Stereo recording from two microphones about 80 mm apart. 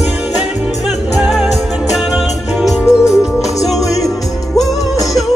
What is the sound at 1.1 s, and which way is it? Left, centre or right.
Music, centre.